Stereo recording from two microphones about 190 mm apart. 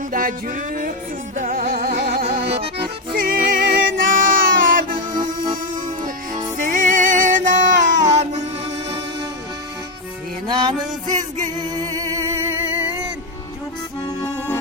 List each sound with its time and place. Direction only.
0.1 s music: 50° right (ahead or behind)
6.6 s music: 40° right (ahead or behind)
10.4 s music: 25° right (ahead or behind)
11.9 s music: 15° right (ahead or behind)